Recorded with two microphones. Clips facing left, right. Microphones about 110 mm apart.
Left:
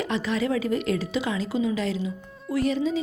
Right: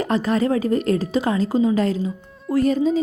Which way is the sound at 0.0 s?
45° right (ahead or behind).